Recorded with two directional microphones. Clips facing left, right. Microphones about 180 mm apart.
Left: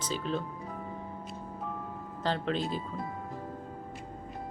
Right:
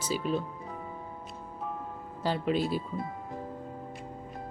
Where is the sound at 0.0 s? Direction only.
10° right (ahead or behind).